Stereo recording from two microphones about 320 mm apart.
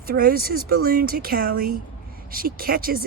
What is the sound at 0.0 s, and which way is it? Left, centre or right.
Speech, right.